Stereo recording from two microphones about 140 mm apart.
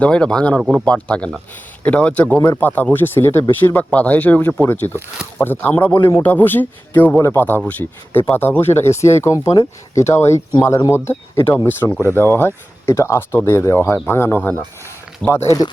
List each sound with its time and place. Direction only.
0.0 s speech: 5° left (ahead or behind)